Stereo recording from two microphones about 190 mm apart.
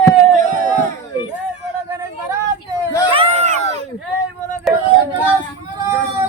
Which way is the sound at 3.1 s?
30° right (ahead or behind).